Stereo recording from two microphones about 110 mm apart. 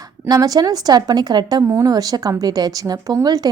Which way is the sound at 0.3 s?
35° right (ahead or behind).